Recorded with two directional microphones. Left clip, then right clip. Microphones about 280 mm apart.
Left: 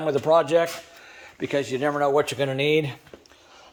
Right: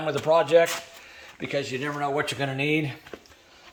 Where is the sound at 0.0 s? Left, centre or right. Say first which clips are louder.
Left 2 dB; centre.